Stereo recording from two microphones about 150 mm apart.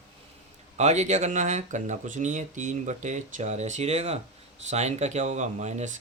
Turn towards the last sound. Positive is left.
turn(degrees=-50)  # may be behind; listen again after turning